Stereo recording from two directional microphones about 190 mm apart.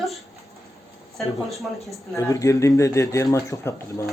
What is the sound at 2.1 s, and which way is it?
Speech, 15° left (ahead or behind).